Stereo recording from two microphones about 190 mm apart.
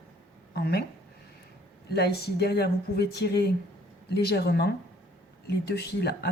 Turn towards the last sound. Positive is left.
turn(degrees=60)  # may be behind; listen again after turning